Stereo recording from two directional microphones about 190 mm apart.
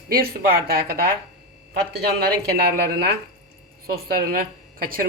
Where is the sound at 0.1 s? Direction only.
50° right (ahead or behind).